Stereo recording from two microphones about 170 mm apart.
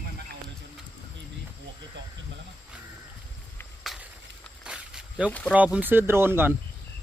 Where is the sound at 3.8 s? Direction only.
Centre (ahead or behind).